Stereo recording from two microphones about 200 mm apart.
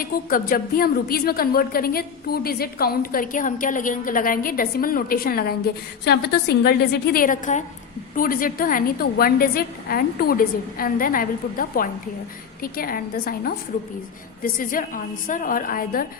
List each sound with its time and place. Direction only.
0.0 s a woman's voice: 45° left (ahead or behind)